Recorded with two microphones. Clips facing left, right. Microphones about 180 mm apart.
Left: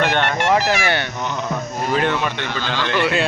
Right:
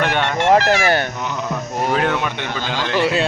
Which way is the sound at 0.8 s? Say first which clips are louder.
Right 4 dB; 40° right (ahead or behind).